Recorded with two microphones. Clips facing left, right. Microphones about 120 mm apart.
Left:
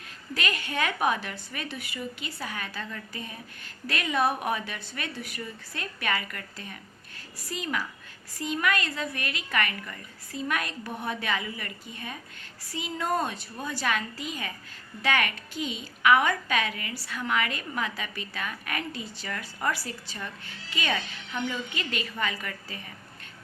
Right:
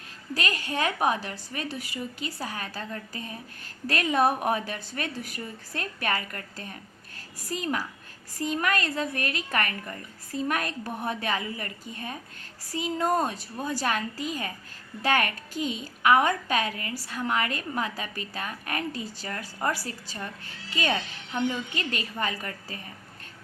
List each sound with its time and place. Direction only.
0.3 s a woman's voice: 35° right (ahead or behind)